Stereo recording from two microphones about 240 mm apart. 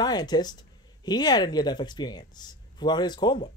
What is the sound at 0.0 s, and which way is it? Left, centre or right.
Speech, centre.